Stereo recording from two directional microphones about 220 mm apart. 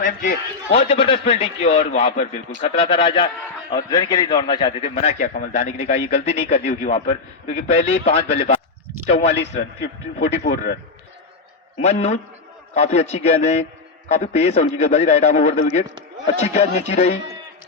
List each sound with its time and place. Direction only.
0.0 s a man's voice: 35° left (ahead or behind)
10.2 s speech: 55° left (ahead or behind)
11.8 s a man's voice: 30° left (ahead or behind)